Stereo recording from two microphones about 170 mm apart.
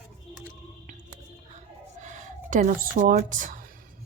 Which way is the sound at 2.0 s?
50° right (ahead or behind).